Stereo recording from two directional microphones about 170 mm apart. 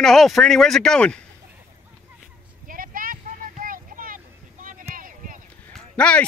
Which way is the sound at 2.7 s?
55° right (ahead or behind).